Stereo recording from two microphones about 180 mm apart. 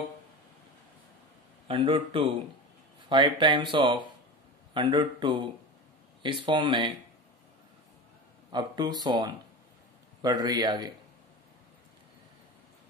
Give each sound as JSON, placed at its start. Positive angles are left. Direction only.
{"t": 1.7, "sound": "speech", "side_deg": -30}
{"t": 8.5, "sound": "speech", "side_deg": -25}